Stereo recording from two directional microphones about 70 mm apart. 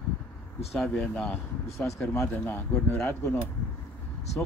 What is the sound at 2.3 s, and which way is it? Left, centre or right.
Speech, left.